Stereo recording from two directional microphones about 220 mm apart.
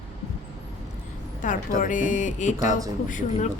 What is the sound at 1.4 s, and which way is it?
A woman's voice, 35° left (ahead or behind).